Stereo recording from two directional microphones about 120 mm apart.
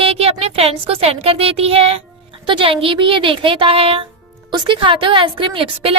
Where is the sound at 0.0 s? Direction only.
55° right (ahead or behind).